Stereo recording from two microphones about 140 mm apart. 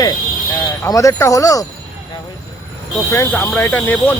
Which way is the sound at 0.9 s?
25° left (ahead or behind).